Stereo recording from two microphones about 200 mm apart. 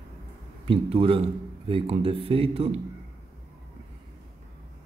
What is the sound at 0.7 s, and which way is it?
Speech, 25° right (ahead or behind).